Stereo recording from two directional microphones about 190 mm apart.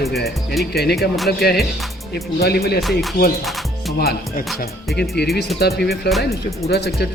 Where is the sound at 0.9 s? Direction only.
Centre (ahead or behind).